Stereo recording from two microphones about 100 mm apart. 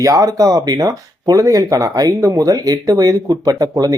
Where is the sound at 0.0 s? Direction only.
35° right (ahead or behind).